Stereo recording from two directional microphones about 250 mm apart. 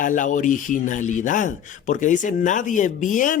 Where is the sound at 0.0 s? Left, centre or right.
Left.